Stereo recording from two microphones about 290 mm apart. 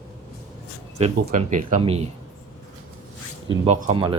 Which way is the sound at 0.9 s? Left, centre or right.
Right.